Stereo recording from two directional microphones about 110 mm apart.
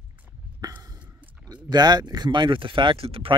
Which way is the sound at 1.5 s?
40° right (ahead or behind).